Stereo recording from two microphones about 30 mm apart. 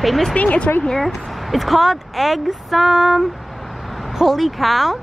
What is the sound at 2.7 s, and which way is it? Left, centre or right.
Female singing, centre.